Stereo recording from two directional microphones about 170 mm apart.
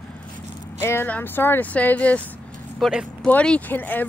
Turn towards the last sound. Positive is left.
turn(degrees=10)  # may be behind; listen again after turning